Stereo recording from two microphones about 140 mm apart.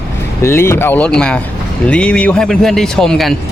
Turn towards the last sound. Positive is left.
turn(degrees=0)  # may be behind; listen again after turning